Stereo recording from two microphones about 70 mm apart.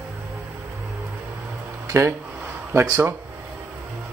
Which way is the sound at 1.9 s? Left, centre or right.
Right.